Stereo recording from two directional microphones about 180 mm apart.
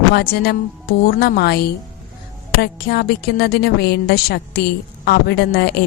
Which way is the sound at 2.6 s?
65° left (ahead or behind).